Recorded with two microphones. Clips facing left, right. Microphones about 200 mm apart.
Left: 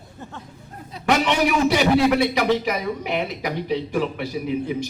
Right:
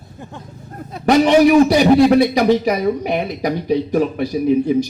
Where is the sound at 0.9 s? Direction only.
50° right (ahead or behind).